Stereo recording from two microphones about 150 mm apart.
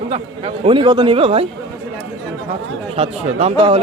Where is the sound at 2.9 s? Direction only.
45° right (ahead or behind).